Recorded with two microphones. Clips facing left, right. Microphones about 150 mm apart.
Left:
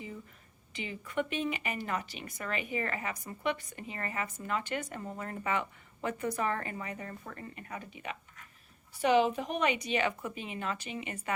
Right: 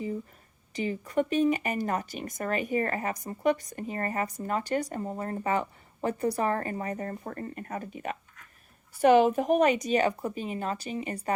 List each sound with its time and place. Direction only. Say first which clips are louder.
0.7 s speech: right 9 dB; 40° right (ahead or behind)